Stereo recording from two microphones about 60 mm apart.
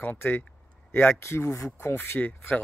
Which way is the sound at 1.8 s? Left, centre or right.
Left.